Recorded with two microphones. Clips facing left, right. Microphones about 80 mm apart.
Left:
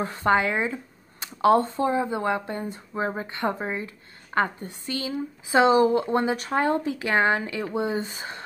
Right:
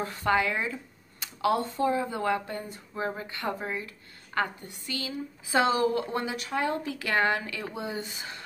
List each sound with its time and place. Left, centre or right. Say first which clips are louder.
0.0 s speech: left 4 dB; left